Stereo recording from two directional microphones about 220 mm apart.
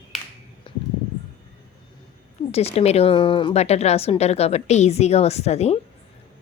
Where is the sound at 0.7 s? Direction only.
20° left (ahead or behind).